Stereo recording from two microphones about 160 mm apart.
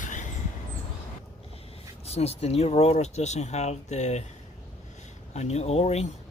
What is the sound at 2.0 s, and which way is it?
Speech, 40° left (ahead or behind).